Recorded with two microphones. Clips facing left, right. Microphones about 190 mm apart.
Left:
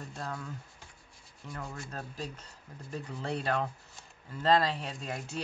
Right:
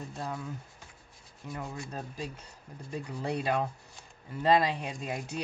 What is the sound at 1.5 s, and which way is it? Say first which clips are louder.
Speech: right 3 dB; 20° right (ahead or behind).